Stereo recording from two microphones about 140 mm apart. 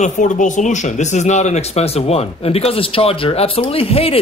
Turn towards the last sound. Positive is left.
turn(degrees=40)  # may be behind; listen again after turning